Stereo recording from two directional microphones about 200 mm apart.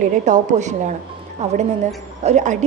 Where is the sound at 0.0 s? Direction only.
40° right (ahead or behind).